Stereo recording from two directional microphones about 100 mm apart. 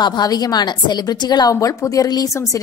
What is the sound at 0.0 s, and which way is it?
A woman's voice, 45° left (ahead or behind).